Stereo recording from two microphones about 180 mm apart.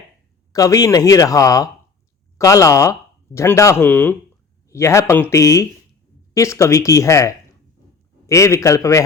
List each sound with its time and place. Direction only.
0.5 s speech: 20° left (ahead or behind)